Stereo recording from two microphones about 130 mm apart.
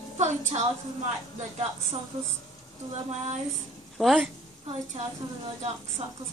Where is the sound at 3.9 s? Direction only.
Centre (ahead or behind).